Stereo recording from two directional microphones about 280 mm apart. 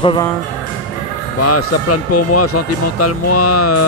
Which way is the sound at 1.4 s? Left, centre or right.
Left.